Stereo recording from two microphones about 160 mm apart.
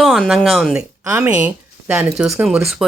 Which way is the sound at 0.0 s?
Centre (ahead or behind).